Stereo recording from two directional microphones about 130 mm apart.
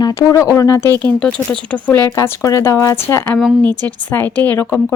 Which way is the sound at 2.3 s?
20° left (ahead or behind).